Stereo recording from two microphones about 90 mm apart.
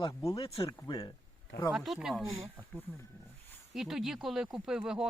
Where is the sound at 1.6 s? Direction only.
Centre (ahead or behind).